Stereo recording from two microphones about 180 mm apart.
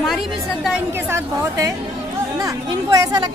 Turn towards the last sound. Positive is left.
turn(degrees=-20)  # may be behind; listen again after turning